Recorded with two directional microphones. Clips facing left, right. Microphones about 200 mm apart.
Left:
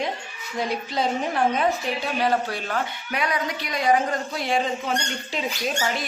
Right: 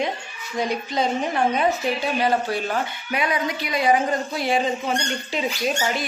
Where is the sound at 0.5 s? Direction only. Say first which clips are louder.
Right 2 dB; centre (ahead or behind).